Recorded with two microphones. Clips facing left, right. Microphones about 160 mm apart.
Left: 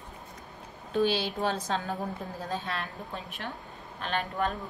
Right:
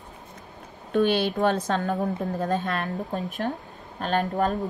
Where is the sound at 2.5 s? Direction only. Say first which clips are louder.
Right 8 dB; 50° right (ahead or behind).